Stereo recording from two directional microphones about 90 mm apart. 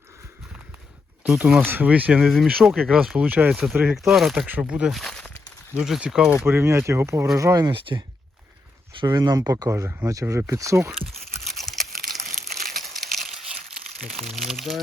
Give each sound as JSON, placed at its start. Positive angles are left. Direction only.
{"t": 1.5, "sound": "speech", "side_deg": -25}
{"t": 2.2, "sound": "speech", "side_deg": 0}
{"t": 3.2, "sound": "speech", "side_deg": -20}
{"t": 3.9, "sound": "speech", "side_deg": 0}
{"t": 4.4, "sound": "speech", "side_deg": -15}
{"t": 4.9, "sound": "speech", "side_deg": 0}
{"t": 6.3, "sound": "speech", "side_deg": -25}
{"t": 7.7, "sound": "speech", "side_deg": -70}
{"t": 9.0, "sound": "speech", "side_deg": -50}
{"t": 11.4, "sound": "crumpling", "side_deg": 0}
{"t": 14.2, "sound": "speech", "side_deg": 0}